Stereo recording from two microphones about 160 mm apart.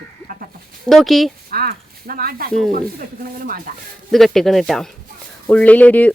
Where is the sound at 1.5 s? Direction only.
70° right (ahead or behind).